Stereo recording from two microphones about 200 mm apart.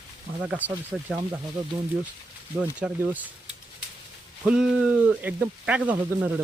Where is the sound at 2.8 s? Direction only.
5° right (ahead or behind).